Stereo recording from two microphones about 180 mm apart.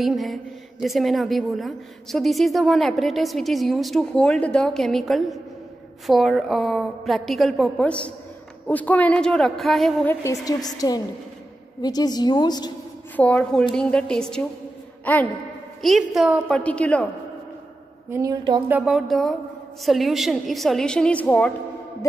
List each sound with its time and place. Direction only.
0.0 s a woman's voice: centre (ahead or behind)
10.2 s a woman's voice: 20° left (ahead or behind)
13.1 s a woman's voice: 5° left (ahead or behind)
18.1 s a woman's voice: 20° right (ahead or behind)
18.7 s a woman's voice: 5° right (ahead or behind)